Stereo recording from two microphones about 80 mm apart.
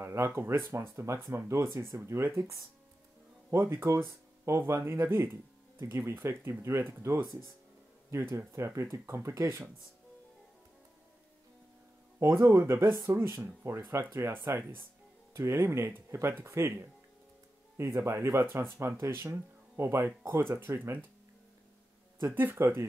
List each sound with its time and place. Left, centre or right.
0.0 s speech: right
12.2 s speech: right
12.9 s speech: right
13.4 s speech: right
22.2 s speech: right